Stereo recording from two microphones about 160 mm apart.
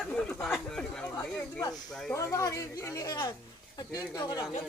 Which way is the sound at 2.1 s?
15° left (ahead or behind).